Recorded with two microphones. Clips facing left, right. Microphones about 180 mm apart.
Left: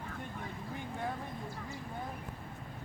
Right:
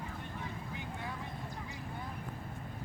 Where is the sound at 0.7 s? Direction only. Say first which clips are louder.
Left 7 dB; 50° left (ahead or behind).